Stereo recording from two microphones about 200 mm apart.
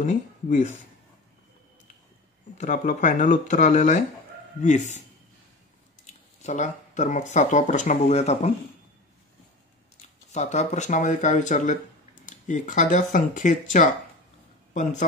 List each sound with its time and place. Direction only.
0.0 s speech: 40° left (ahead or behind)
2.5 s speech: 40° left (ahead or behind)
6.0 s speech: 35° left (ahead or behind)
10.3 s speech: 35° left (ahead or behind)